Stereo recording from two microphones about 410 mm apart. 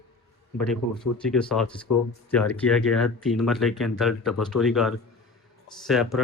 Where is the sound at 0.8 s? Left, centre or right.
Left.